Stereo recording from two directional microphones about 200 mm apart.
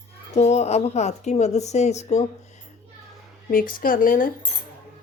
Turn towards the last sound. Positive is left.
turn(degrees=45)  # may be behind; listen again after turning